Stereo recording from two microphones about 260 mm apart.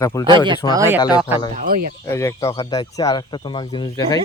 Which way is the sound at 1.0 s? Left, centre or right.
Centre.